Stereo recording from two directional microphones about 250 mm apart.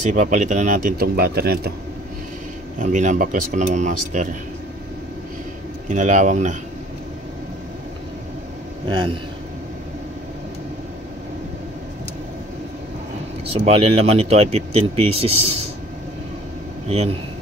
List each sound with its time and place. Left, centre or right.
0.1 s speech: right
2.8 s speech: right
5.9 s speech: right
8.8 s speech: centre
13.5 s speech: right